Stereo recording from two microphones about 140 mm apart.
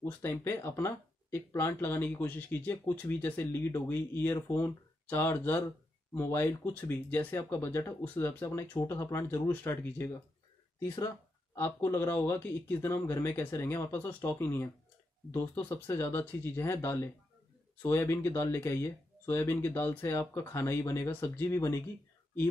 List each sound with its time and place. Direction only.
0.0 s speech: 15° left (ahead or behind)